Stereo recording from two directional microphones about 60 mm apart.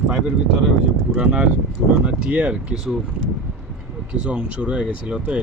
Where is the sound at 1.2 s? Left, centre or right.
Centre.